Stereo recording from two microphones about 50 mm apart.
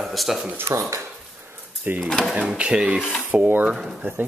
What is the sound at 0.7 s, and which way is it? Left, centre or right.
Speech, right.